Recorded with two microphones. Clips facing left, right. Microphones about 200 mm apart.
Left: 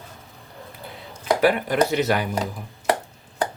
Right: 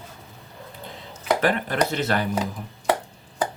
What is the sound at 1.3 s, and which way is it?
Speech, 10° left (ahead or behind).